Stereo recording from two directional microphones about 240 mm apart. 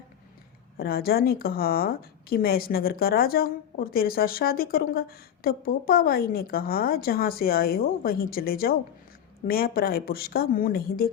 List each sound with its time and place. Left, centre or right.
0.8 s a woman's voice: left